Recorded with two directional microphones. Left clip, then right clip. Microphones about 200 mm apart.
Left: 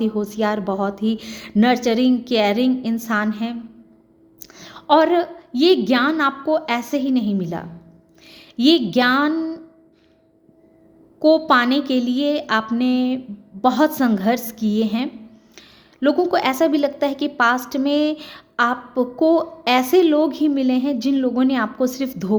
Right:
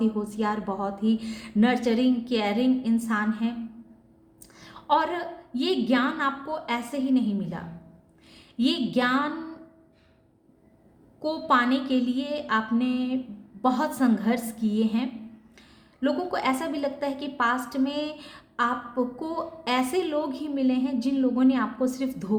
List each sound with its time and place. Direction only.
0.0 s a woman's voice: 40° left (ahead or behind)
4.4 s a sound: 45° left (ahead or behind)
5.9 s a woman's voice: 45° left (ahead or behind)
11.2 s a woman's voice: 45° left (ahead or behind)